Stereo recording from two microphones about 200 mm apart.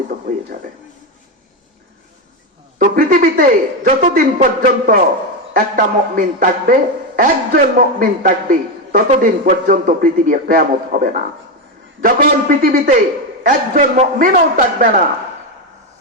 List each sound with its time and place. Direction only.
2.7 s a man's voice: 45° right (ahead or behind)